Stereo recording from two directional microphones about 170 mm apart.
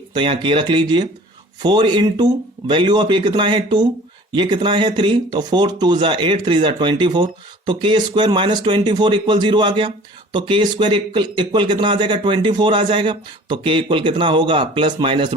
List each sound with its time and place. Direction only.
0.1 s speech: 30° right (ahead or behind)